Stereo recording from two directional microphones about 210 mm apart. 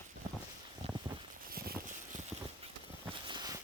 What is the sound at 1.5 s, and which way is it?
Vehicle, 45° right (ahead or behind).